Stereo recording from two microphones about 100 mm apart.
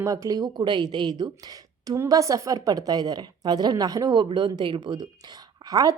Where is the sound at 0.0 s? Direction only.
30° right (ahead or behind).